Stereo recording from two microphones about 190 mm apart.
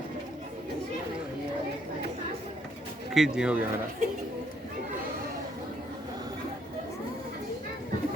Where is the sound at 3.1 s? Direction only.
5° right (ahead or behind).